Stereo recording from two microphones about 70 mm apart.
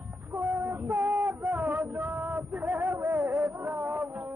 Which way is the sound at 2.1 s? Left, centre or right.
Right.